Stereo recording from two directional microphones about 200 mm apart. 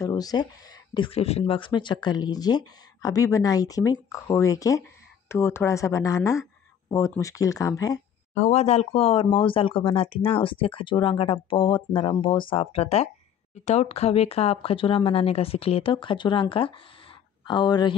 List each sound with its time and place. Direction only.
0.0 s speech: 20° left (ahead or behind)
8.4 s speech: 35° left (ahead or behind)